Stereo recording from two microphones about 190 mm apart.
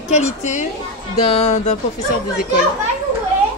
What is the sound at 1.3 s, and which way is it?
Speech, 35° left (ahead or behind).